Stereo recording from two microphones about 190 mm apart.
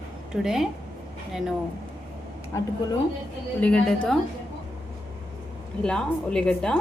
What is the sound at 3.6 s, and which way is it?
Speech, 5° left (ahead or behind).